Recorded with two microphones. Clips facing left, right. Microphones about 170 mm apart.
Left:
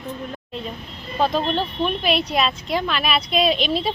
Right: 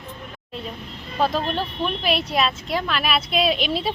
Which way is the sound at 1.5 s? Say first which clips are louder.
Left 3 dB; 5° right (ahead or behind).